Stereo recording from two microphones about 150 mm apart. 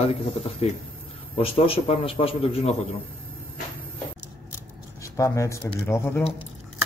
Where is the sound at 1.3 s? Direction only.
40° left (ahead or behind).